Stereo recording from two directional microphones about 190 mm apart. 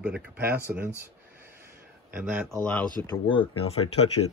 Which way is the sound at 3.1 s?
25° left (ahead or behind).